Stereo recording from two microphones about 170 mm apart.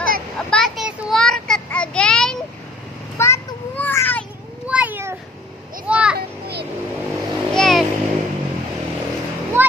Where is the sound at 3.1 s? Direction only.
15° left (ahead or behind).